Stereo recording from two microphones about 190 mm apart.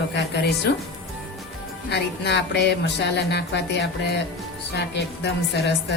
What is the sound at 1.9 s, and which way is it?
Music, 65° left (ahead or behind).